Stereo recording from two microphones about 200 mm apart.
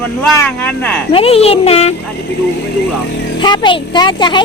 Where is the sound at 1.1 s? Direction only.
30° left (ahead or behind).